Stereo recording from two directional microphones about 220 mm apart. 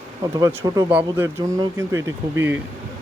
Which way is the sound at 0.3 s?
15° right (ahead or behind).